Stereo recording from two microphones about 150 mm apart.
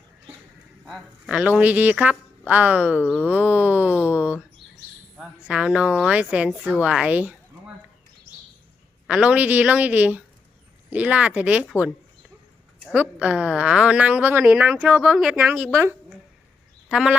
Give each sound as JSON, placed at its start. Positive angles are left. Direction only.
{"t": 0.9, "sound": "a woman's voice", "side_deg": -5}
{"t": 9.0, "sound": "a woman's voice", "side_deg": -10}
{"t": 12.9, "sound": "a woman's voice", "side_deg": -10}